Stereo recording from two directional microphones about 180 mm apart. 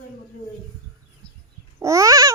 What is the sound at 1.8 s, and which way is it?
Speech, 15° right (ahead or behind).